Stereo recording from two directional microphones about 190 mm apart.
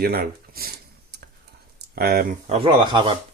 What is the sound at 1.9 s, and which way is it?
Speech, 50° right (ahead or behind).